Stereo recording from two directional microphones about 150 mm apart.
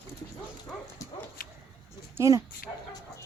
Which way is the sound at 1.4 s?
75° left (ahead or behind).